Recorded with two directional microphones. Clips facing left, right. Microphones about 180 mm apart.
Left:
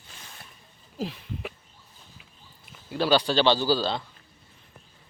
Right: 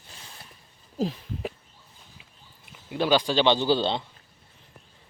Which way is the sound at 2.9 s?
15° right (ahead or behind).